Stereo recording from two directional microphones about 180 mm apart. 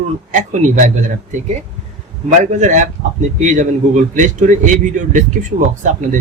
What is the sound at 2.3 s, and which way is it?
Speech, 45° right (ahead or behind).